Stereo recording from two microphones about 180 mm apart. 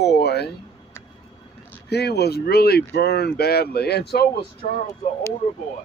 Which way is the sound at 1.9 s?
65° left (ahead or behind).